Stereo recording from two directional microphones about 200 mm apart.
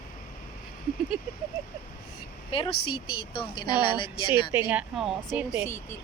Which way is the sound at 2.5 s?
25° left (ahead or behind).